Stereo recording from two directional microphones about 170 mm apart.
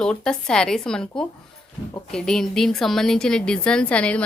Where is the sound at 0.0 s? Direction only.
5° left (ahead or behind).